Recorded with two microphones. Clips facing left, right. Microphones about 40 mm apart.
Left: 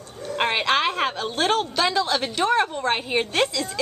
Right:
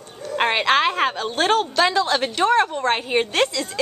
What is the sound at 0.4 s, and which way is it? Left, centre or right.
A woman's voice, centre.